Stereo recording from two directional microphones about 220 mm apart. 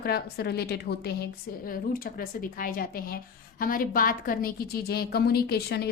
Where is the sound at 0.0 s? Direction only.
45° left (ahead or behind).